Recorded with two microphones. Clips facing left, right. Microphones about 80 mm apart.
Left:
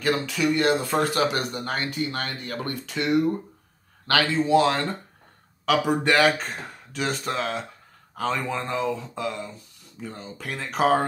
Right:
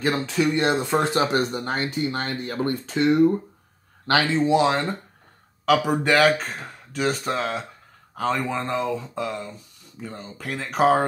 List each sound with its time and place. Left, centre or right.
0.0 s speech: right
5.7 s speech: centre